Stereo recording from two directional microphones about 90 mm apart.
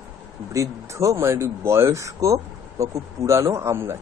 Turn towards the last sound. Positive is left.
turn(degrees=-30)  # may be behind; listen again after turning